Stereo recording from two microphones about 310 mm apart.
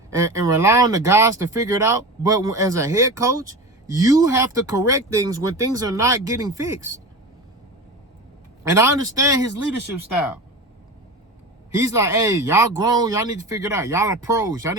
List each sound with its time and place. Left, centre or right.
0.2 s speech: centre
8.7 s speech: centre
9.6 s speech: left
11.8 s speech: centre